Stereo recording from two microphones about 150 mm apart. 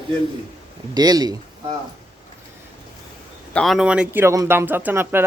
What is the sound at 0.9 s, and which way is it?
Speech, 25° right (ahead or behind).